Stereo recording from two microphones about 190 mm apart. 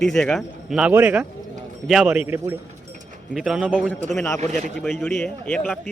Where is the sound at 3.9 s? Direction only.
5° left (ahead or behind).